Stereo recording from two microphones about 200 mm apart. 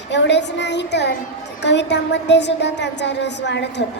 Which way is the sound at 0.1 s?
60° left (ahead or behind).